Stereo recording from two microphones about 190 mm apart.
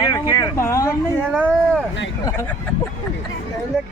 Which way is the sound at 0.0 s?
20° left (ahead or behind).